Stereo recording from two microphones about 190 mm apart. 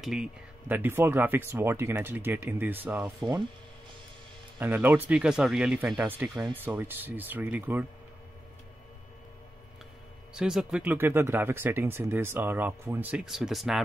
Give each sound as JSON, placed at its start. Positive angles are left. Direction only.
{"t": 0.0, "sound": "speech", "side_deg": -5}
{"t": 3.2, "sound": "speech", "side_deg": -20}
{"t": 4.6, "sound": "speech", "side_deg": -10}
{"t": 10.3, "sound": "speech", "side_deg": -5}